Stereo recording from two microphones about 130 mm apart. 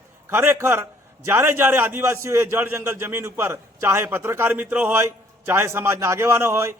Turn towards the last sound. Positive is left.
turn(degrees=-20)  # may be behind; listen again after turning